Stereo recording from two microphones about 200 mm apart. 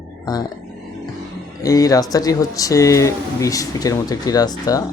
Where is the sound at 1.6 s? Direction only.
15° left (ahead or behind).